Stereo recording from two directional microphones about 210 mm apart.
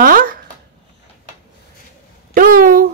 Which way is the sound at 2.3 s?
40° right (ahead or behind).